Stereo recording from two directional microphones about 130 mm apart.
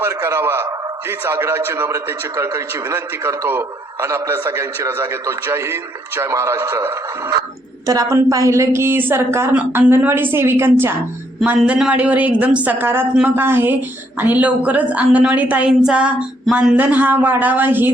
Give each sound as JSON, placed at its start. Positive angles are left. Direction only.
{"t": 0.0, "sound": "a man's voice", "side_deg": -20}